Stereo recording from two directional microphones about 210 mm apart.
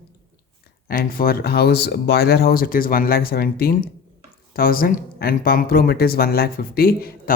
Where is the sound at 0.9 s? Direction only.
45° left (ahead or behind).